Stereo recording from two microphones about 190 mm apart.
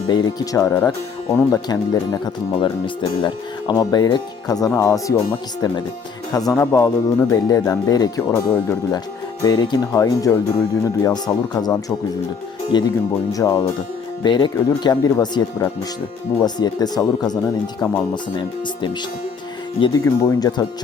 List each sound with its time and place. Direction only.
0.1 s speech: 20° left (ahead or behind)
18.1 s speech: 25° left (ahead or behind)